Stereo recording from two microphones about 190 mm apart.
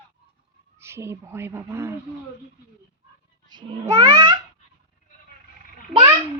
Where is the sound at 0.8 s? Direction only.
15° right (ahead or behind).